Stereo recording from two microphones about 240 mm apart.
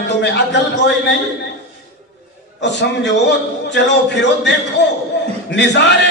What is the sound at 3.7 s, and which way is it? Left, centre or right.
A man's voice, left.